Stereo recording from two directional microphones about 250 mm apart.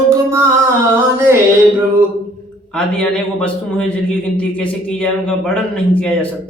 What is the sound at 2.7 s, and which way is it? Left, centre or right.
A man's voice, centre.